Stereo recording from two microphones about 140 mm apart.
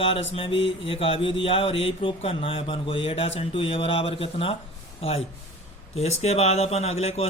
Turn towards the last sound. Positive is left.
turn(degrees=50)  # may be behind; listen again after turning